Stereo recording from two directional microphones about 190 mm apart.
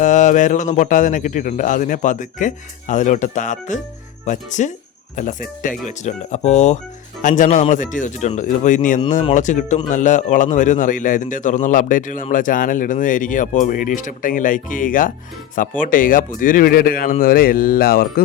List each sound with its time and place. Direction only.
0.0 s a man's voice: 40° left (ahead or behind)